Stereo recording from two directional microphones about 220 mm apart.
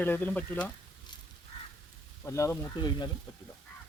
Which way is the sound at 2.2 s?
15° left (ahead or behind).